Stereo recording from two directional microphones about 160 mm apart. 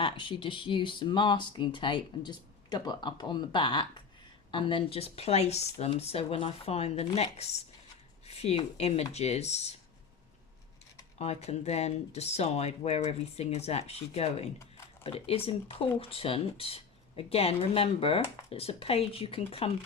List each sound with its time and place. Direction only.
0.0 s speech: 30° left (ahead or behind)
11.2 s speech: 40° left (ahead or behind)